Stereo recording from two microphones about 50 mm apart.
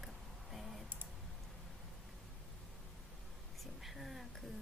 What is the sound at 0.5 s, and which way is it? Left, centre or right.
Clicking, centre.